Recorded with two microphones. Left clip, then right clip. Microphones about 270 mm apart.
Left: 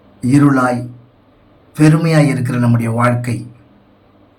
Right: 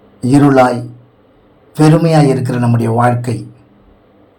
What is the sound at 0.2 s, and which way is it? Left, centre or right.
Speech, centre.